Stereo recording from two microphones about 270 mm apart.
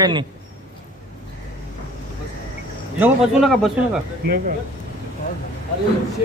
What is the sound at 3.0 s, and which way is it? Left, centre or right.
Speech, centre.